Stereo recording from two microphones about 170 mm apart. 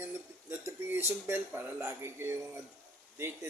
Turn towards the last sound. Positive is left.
turn(degrees=-15)  # may be behind; listen again after turning